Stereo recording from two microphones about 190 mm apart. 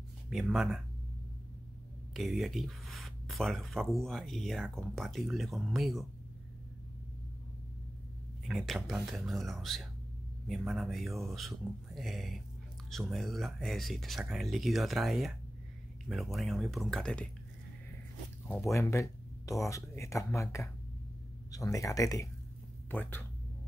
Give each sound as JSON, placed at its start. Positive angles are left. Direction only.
{"t": 0.3, "sound": "speech", "side_deg": 0}
{"t": 2.1, "sound": "speech", "side_deg": 0}
{"t": 8.5, "sound": "speech", "side_deg": 0}
{"t": 18.5, "sound": "speech", "side_deg": 15}